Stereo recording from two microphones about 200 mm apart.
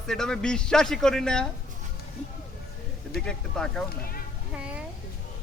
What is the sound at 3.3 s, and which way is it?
Speech, 5° left (ahead or behind).